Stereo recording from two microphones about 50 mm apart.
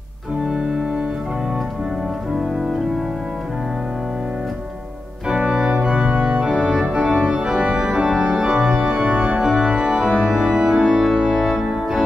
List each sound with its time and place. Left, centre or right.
5.3 s organ: centre
5.9 s organ: right
6.4 s organ: centre
6.9 s organ: right
9.4 s organ: centre